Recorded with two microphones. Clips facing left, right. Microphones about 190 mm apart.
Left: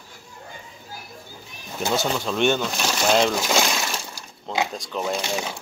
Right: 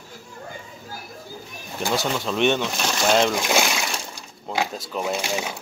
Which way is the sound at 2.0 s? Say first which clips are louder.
Even; centre (ahead or behind).